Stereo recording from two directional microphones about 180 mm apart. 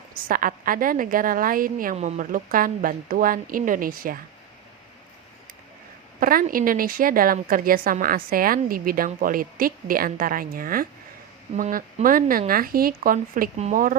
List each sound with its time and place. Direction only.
0.1 s a woman's voice: 50° right (ahead or behind)
6.1 s a woman's voice: 50° right (ahead or behind)